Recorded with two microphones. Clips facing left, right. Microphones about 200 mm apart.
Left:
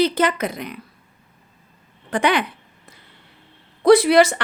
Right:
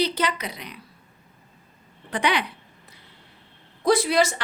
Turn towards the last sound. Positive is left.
turn(degrees=65)  # may be behind; listen again after turning